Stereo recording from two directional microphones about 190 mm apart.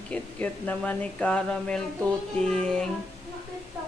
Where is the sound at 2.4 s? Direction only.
5° left (ahead or behind).